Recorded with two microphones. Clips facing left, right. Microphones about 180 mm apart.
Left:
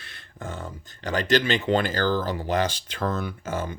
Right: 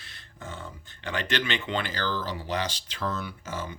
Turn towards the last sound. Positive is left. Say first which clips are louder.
# left 6 dB
turn(degrees=50)  # may be behind; listen again after turning